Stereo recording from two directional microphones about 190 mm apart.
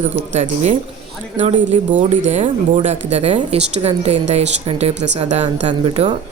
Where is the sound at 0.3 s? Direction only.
40° right (ahead or behind).